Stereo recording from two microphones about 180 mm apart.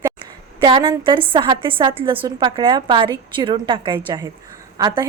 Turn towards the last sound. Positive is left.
turn(degrees=-20)  # may be behind; listen again after turning